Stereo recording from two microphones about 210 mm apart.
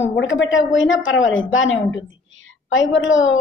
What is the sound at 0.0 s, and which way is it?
Speech, 60° left (ahead or behind).